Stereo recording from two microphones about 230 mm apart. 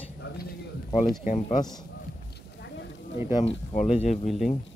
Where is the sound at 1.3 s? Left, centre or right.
Left.